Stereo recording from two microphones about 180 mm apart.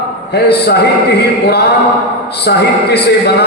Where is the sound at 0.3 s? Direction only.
65° left (ahead or behind).